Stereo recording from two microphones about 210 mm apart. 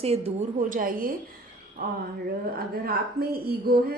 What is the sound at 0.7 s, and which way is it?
A woman's voice, 40° right (ahead or behind).